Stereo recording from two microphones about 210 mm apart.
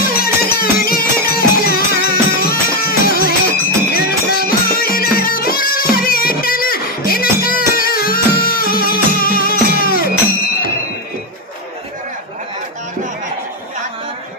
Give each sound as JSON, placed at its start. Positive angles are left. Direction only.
{"t": 0.0, "sound": "music", "side_deg": 45}